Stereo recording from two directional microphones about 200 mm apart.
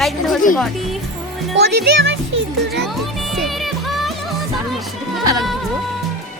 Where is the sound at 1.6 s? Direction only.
55° right (ahead or behind).